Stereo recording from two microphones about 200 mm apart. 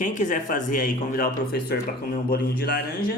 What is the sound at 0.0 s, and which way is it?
Speech, 40° left (ahead or behind).